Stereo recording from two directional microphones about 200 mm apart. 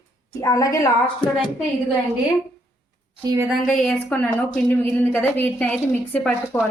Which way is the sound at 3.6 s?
5° left (ahead or behind).